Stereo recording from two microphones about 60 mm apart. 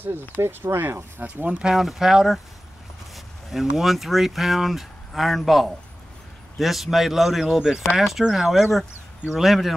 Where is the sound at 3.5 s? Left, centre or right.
Centre.